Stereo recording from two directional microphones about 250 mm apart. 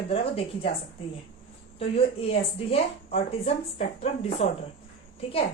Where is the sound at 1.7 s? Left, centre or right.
Left.